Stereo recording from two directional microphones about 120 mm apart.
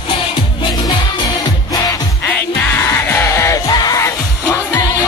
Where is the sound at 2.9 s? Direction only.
20° left (ahead or behind).